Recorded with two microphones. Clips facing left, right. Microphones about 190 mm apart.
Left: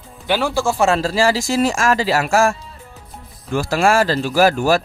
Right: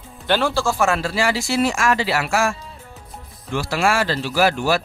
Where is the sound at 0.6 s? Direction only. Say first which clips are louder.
Left 3 dB; 25° left (ahead or behind).